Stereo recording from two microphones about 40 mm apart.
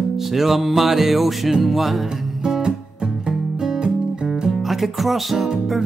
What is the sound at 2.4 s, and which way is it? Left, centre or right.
Guitar, centre.